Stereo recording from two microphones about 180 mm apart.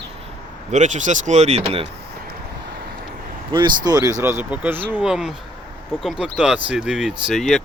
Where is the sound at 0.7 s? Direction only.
40° right (ahead or behind).